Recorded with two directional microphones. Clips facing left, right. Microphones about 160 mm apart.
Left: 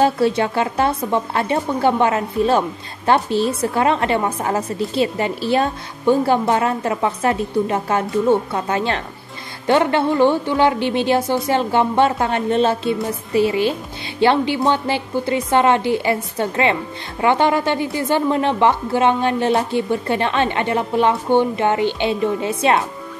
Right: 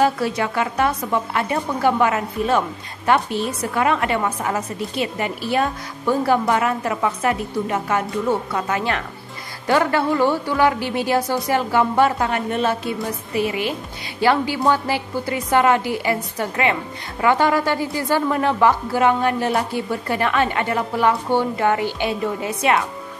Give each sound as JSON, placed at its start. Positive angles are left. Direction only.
{"t": 0.0, "sound": "a woman's voice", "side_deg": 30}